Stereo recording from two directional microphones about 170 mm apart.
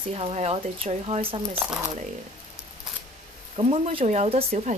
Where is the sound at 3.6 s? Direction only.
35° right (ahead or behind).